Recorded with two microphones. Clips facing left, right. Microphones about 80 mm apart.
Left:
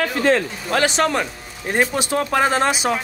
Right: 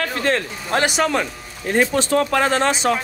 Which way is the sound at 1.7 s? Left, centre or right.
Centre.